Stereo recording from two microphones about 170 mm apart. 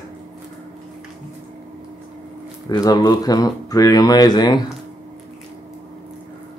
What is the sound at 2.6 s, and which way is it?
Speech, 25° left (ahead or behind).